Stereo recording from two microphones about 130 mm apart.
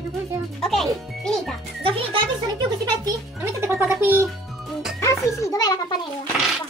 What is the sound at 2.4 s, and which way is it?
Speech, 30° right (ahead or behind).